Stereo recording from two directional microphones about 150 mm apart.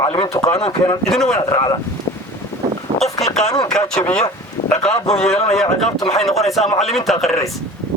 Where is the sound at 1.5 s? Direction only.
30° left (ahead or behind).